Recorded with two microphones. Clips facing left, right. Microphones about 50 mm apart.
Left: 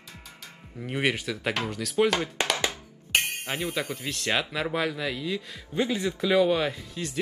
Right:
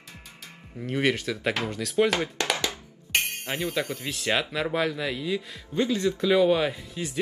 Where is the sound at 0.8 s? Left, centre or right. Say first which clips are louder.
Right 2 dB; centre.